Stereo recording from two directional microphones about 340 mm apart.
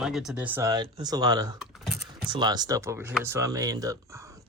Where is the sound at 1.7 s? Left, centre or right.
Centre.